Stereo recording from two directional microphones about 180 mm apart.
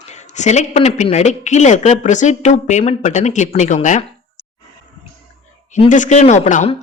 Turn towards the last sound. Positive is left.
turn(degrees=45)  # may be behind; listen again after turning